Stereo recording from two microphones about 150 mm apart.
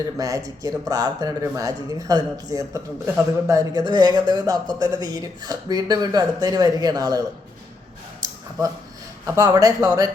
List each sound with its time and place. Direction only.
0.2 s speech: 20° right (ahead or behind)
9.2 s speech: 20° right (ahead or behind)